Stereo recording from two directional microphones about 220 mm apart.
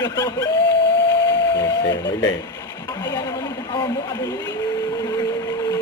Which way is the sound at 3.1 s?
20° left (ahead or behind).